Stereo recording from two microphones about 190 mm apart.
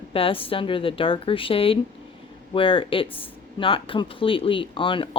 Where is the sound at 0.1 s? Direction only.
30° left (ahead or behind).